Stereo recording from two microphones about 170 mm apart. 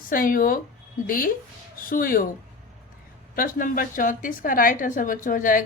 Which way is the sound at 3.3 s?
55° left (ahead or behind).